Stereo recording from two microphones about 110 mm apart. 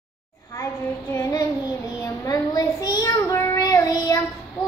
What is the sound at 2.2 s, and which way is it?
Child singing, 35° left (ahead or behind).